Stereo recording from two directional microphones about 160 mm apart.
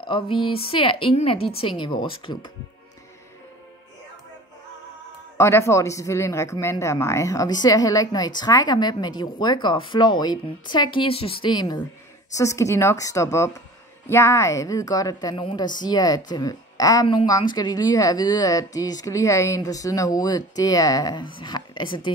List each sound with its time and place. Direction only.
0.0 s a woman's voice: 30° left (ahead or behind)
5.4 s a woman's voice: 15° left (ahead or behind)